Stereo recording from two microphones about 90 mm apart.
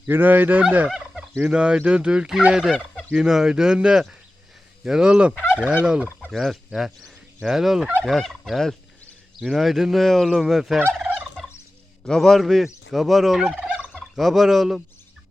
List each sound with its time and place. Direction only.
0.1 s speech: 20° right (ahead or behind)
0.6 s fowl: 20° right (ahead or behind)
6.3 s speech: centre (ahead or behind)
10.8 s fowl: 20° right (ahead or behind)
12.0 s fowl: 5° left (ahead or behind); by 14.0 s 10° right (ahead or behind)
14.2 s speech: centre (ahead or behind)